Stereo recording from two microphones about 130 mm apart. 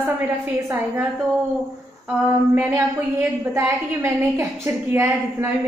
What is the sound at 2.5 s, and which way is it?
A woman's voice, 15° right (ahead or behind).